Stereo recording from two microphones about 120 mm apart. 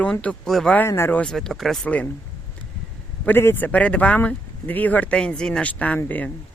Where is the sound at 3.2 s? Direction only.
20° left (ahead or behind).